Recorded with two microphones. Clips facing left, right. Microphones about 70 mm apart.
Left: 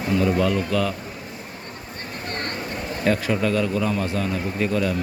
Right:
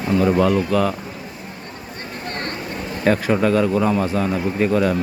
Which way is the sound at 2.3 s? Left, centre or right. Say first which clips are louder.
Right 2 dB; right.